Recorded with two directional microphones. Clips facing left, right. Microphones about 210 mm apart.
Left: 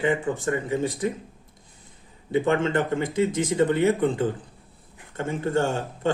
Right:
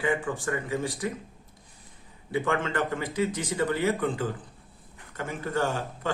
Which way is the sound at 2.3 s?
25° left (ahead or behind).